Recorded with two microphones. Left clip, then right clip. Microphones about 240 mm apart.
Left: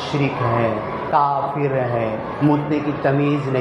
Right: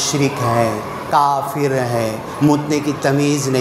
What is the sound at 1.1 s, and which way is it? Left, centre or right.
A man's voice, right.